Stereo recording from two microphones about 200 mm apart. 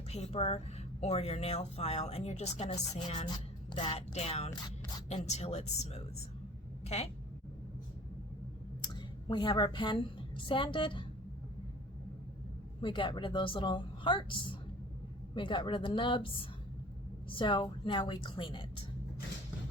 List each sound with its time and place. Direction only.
0.1 s a woman's voice: 30° left (ahead or behind)
8.8 s a woman's voice: 20° left (ahead or behind)
12.8 s a woman's voice: 25° left (ahead or behind)